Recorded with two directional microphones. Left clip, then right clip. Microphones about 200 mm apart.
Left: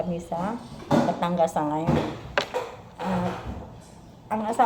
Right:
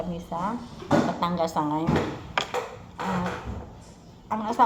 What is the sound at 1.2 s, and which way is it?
Speech, 5° right (ahead or behind).